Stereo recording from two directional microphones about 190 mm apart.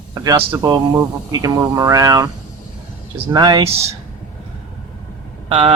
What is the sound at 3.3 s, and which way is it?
Speech, 20° right (ahead or behind).